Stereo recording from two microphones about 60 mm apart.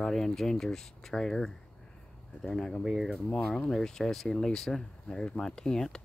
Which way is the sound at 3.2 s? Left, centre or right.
Centre.